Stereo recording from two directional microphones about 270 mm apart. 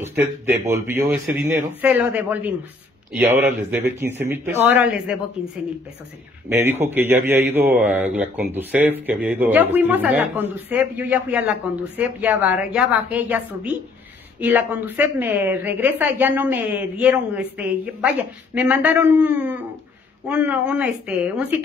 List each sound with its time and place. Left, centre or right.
0.0 s a woman's voice: centre
6.5 s a woman's voice: centre